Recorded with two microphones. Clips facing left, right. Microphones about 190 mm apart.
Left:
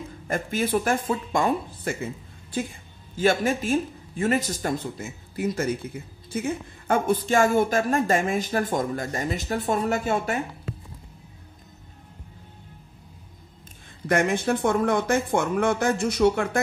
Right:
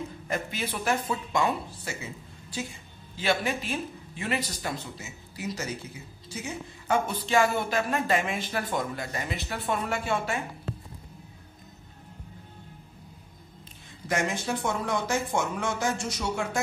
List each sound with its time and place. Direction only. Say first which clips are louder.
0.3 s speech: left 8 dB; 50° left (ahead or behind)
14.0 s speech: left 6 dB; 55° left (ahead or behind)